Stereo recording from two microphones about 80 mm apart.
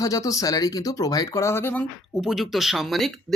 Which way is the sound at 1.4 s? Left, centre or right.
Left.